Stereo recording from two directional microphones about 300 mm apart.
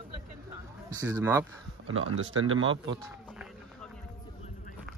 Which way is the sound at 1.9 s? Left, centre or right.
Right.